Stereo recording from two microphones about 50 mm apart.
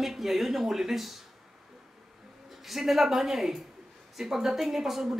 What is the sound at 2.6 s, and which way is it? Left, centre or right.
Speech, centre.